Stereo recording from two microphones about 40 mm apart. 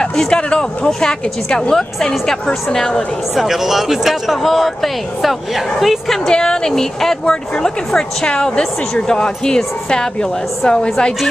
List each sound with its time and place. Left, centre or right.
0.3 s a woman's voice: left
3.3 s speech: centre
6.2 s a woman's voice: centre